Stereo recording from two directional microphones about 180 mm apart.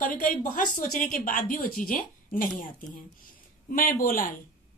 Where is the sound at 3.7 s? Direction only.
55° left (ahead or behind).